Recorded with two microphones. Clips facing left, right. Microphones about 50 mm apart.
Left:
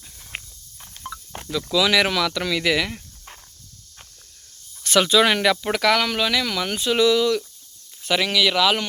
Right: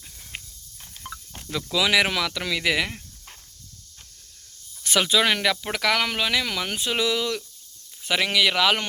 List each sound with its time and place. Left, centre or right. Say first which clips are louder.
0.3 s walk: left 4 dB; left
1.0 s cricket: left 4 dB; centre
1.7 s speech: left 2 dB; centre
4.9 s snake: left 5 dB; centre
5.2 s speech: left 4 dB; centre
6.0 s speech: left 2 dB; centre